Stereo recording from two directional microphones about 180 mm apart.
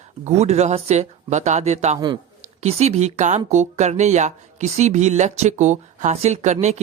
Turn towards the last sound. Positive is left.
turn(degrees=-40)  # may be behind; listen again after turning